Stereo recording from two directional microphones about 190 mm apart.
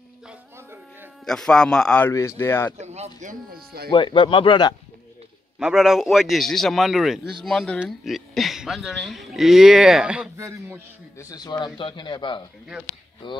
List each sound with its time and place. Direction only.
0.3 s music: 15° right (ahead or behind)
1.2 s a man's voice: 5° left (ahead or behind)
2.8 s speech: 35° right (ahead or behind); by 3.9 s 55° right (ahead or behind)
3.9 s speech: 25° left (ahead or behind)
5.6 s speech: 5° right (ahead or behind)
10.3 s speech: 15° right (ahead or behind)
11.1 s speech: 20° left (ahead or behind)